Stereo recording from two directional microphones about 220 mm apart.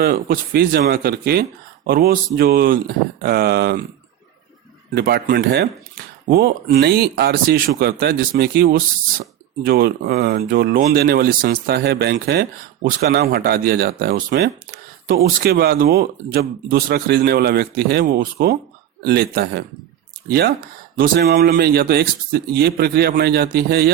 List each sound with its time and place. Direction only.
0.0 s speech: 45° right (ahead or behind)
4.9 s speech: 45° right (ahead or behind)